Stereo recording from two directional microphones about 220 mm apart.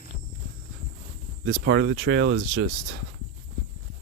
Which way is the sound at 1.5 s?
55° right (ahead or behind).